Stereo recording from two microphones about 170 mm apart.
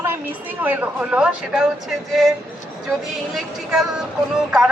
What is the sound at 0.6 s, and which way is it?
A woman's voice, 10° right (ahead or behind).